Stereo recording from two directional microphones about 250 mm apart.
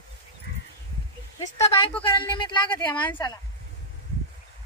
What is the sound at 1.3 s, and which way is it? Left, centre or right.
A woman's voice, centre.